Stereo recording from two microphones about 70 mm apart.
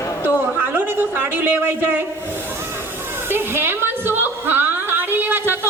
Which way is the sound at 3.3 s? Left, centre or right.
Right.